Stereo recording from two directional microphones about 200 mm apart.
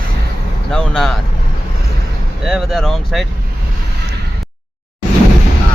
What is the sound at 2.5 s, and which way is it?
Speech, centre (ahead or behind).